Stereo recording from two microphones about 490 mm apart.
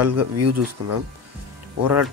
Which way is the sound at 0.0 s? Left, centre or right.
Right.